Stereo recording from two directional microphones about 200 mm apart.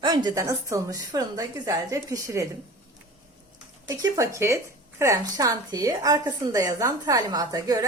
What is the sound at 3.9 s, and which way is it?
A woman's voice, 15° right (ahead or behind).